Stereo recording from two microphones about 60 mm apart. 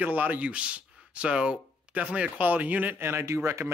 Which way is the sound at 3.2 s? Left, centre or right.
Right.